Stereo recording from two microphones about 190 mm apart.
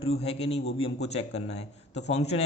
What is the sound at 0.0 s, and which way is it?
A man's voice, 30° left (ahead or behind).